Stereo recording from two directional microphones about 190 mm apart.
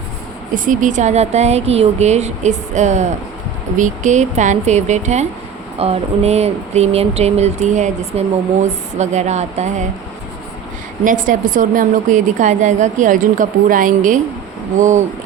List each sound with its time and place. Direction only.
0.5 s speech: 45° right (ahead or behind)
11.0 s a woman's voice: 45° right (ahead or behind)